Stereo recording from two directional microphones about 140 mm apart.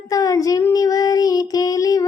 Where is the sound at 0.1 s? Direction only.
25° left (ahead or behind).